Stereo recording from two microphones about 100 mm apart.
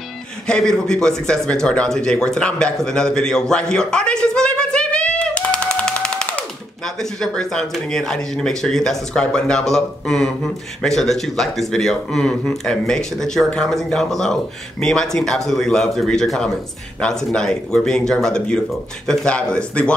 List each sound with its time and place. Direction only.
0.5 s a man's voice: 5° left (ahead or behind)